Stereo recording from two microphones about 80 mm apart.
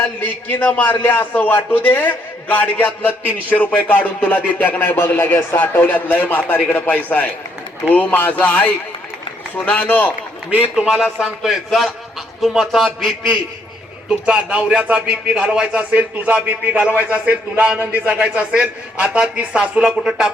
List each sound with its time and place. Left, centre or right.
0.2 s speech: left
10.8 s a man's voice: centre
14.1 s speech: centre